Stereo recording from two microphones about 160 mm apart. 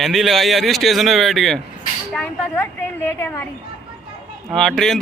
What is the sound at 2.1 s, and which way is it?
A woman's voice, 10° left (ahead or behind).